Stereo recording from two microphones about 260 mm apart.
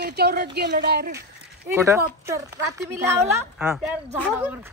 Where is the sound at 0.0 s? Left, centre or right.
Right.